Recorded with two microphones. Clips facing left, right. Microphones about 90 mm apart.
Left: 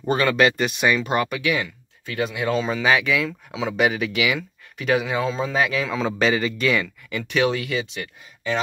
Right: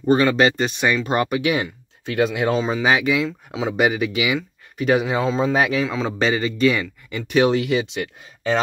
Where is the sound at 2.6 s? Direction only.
15° right (ahead or behind).